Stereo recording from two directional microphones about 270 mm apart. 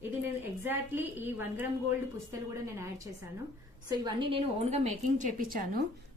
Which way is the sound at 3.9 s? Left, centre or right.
Centre.